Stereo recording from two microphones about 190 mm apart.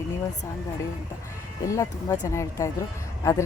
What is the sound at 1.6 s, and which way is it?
Speech, 15° left (ahead or behind).